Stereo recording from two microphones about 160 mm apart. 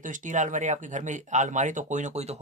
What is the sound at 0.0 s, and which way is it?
Speech, 50° right (ahead or behind).